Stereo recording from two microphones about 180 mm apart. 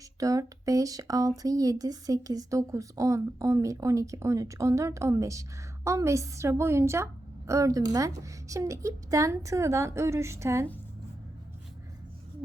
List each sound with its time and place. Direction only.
0.2 s speech: 20° right (ahead or behind)